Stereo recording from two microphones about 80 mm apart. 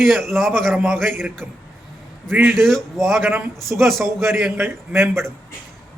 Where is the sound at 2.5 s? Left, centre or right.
Centre.